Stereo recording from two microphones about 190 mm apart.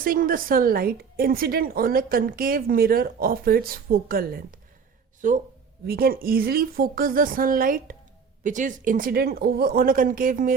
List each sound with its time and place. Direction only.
0.0 s a woman's voice: 50° right (ahead or behind)
5.8 s a woman's voice: 55° right (ahead or behind)